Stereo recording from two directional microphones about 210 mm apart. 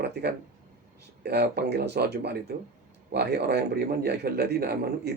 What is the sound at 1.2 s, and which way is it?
Speech, 50° right (ahead or behind).